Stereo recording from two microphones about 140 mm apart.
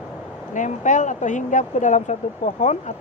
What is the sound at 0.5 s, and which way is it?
Speech, 65° left (ahead or behind).